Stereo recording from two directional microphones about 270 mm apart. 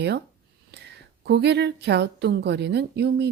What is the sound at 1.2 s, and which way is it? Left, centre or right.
A woman's voice, right.